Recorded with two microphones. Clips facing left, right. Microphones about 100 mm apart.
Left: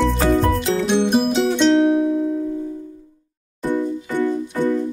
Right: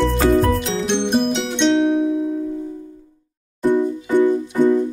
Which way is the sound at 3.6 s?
15° right (ahead or behind).